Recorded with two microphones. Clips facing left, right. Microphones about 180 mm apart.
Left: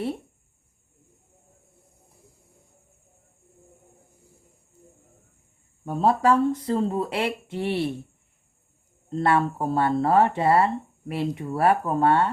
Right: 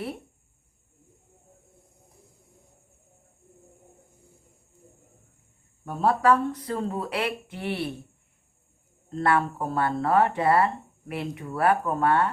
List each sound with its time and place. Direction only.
5.8 s speech: 25° left (ahead or behind)
9.0 s speech: 25° left (ahead or behind)